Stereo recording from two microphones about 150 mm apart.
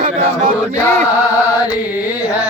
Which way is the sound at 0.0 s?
55° right (ahead or behind).